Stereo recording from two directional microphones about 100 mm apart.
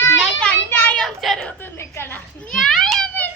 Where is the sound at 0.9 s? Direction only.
Centre (ahead or behind).